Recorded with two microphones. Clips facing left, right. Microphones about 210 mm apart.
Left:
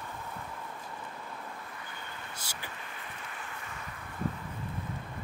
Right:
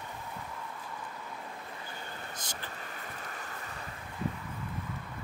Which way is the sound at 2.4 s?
10° left (ahead or behind).